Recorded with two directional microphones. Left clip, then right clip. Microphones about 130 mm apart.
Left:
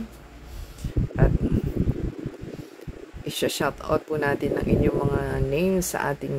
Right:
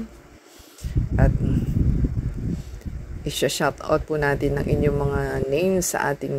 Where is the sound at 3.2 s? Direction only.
35° right (ahead or behind).